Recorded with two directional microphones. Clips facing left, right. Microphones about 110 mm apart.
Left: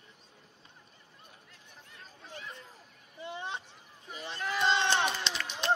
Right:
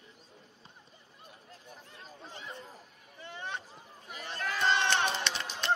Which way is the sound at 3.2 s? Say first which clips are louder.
Left 2 dB; 15° left (ahead or behind).